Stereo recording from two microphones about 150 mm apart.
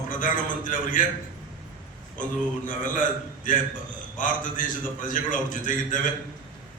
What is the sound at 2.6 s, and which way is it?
Speech, 60° left (ahead or behind).